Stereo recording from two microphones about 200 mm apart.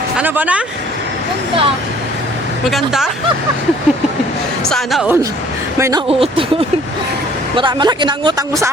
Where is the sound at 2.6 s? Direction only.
Centre (ahead or behind).